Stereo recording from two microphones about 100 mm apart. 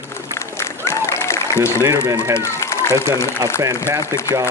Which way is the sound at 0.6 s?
25° left (ahead or behind).